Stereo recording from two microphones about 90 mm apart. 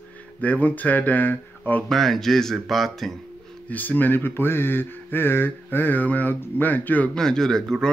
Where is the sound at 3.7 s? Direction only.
20° left (ahead or behind).